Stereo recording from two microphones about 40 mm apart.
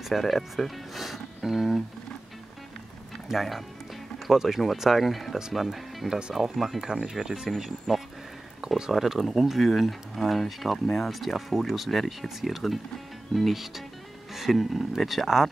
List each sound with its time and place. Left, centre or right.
0.1 s speech: centre
3.3 s speech: centre
6.0 s speech: right
6.3 s speech: centre
7.2 s speech: centre
8.9 s speech: centre